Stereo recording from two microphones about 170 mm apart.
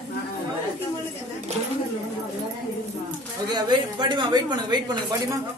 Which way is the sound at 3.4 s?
25° right (ahead or behind).